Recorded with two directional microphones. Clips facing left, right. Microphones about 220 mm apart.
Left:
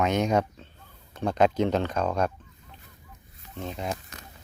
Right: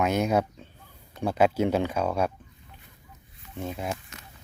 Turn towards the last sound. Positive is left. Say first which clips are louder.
# right 1 dB
turn(degrees=-5)  # may be behind; listen again after turning